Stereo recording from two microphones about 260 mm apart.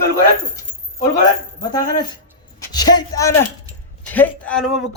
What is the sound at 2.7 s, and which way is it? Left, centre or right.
A man's voice, centre.